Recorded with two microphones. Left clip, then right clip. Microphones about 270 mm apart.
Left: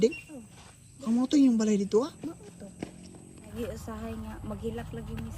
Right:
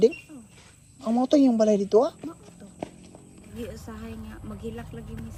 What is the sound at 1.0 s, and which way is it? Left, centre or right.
A woman's voice, centre.